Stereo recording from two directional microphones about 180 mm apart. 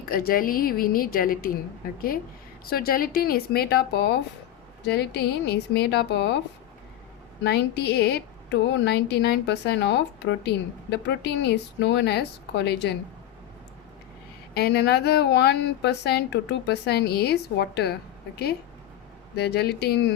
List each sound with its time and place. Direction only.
0.1 s a woman's voice: 55° left (ahead or behind); by 6.4 s 70° left (ahead or behind)
7.4 s speech: 70° left (ahead or behind)
14.5 s speech: 65° left (ahead or behind)
19.4 s speech: 65° left (ahead or behind)